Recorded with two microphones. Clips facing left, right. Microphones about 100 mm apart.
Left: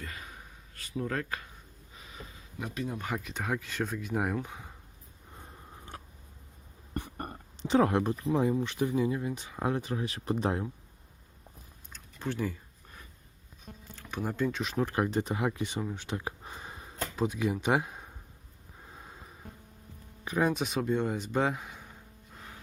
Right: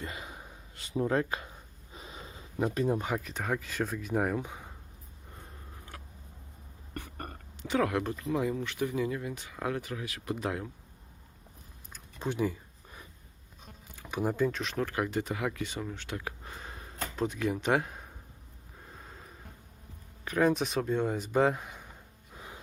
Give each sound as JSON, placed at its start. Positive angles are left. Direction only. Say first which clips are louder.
{"t": 0.0, "sound": "a sound", "louder": "right 3 dB", "side_deg": -25}
{"t": 3.1, "sound": "speech", "louder": "right 1 dB", "side_deg": 0}
{"t": 4.4, "sound": "speech", "louder": "even", "side_deg": -10}
{"t": 5.9, "sound": "a sound", "louder": "left 2 dB", "side_deg": 25}
{"t": 8.0, "sound": "speech", "louder": "left 3 dB", "side_deg": 20}
{"t": 11.9, "sound": "a sound", "louder": "right 1 dB", "side_deg": -15}
{"t": 13.9, "sound": "speech", "louder": "right 3 dB", "side_deg": -10}
{"t": 14.8, "sound": "speech", "louder": "left 3 dB", "side_deg": 25}
{"t": 18.9, "sound": "a sound", "louder": "left 1 dB", "side_deg": 10}
{"t": 20.2, "sound": "speech", "louder": "right 2 dB", "side_deg": 15}
{"t": 20.5, "sound": "speech", "louder": "right 1 dB", "side_deg": 0}
{"t": 22.3, "sound": "music", "louder": "right 2 dB", "side_deg": -15}